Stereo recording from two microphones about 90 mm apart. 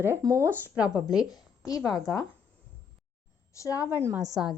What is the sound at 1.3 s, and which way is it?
Speech, 40° left (ahead or behind).